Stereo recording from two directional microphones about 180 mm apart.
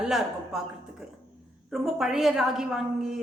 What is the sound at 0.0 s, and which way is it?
A woman's voice, centre (ahead or behind).